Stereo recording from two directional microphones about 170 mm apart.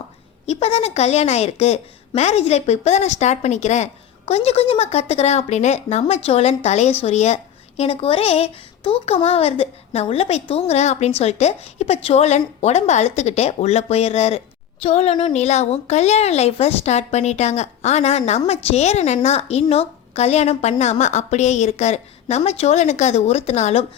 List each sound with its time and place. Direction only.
0.4 s a woman's voice: 40° left (ahead or behind)